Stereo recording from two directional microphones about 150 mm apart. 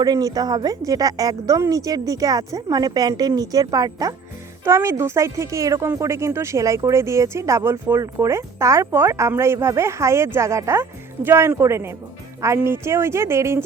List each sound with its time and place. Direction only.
0.0 s a woman's voice: 25° right (ahead or behind)